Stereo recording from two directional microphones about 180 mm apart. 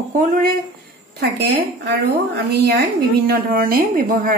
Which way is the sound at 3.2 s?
55° right (ahead or behind).